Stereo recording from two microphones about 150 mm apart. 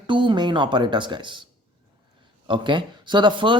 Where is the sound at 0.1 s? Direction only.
30° right (ahead or behind).